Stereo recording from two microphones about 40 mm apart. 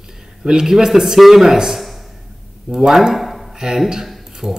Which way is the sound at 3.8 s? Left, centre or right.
Centre.